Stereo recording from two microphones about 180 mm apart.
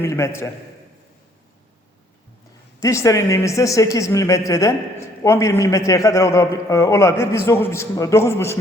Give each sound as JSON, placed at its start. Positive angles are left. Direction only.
{"t": 0.0, "sound": "speech", "side_deg": 15}
{"t": 2.8, "sound": "speech", "side_deg": 15}